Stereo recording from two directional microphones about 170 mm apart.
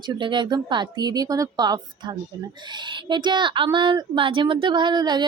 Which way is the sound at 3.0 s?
25° right (ahead or behind).